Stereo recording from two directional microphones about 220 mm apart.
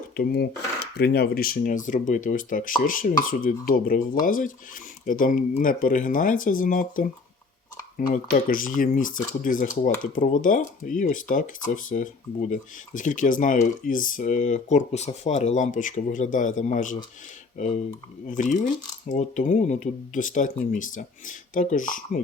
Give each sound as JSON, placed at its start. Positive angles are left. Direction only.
{"t": 0.2, "sound": "speech", "side_deg": 45}